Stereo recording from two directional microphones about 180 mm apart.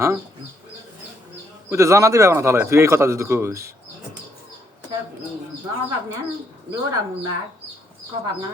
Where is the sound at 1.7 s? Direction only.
15° right (ahead or behind).